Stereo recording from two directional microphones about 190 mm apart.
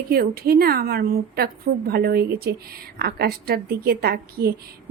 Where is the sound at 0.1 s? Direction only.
50° right (ahead or behind).